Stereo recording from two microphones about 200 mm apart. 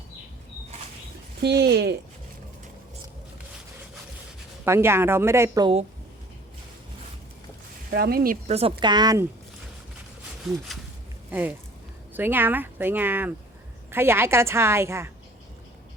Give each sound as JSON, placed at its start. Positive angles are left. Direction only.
{"t": 1.4, "sound": "speech", "side_deg": -55}
{"t": 4.6, "sound": "speech", "side_deg": -10}
{"t": 7.9, "sound": "speech", "side_deg": -50}
{"t": 8.4, "sound": "a woman's voice", "side_deg": -30}
{"t": 10.4, "sound": "speech", "side_deg": 0}